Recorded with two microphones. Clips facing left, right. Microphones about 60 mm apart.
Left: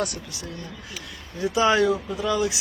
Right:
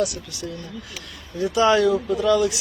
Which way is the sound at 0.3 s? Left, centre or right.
Left.